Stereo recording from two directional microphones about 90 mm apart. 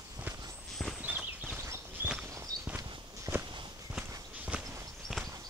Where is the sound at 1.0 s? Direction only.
20° right (ahead or behind).